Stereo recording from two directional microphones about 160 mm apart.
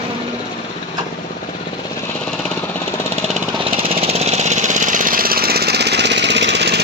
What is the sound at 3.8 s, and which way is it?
Jackhammer, 45° right (ahead or behind).